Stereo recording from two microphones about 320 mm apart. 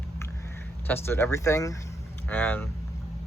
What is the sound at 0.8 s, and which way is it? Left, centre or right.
Speech, centre.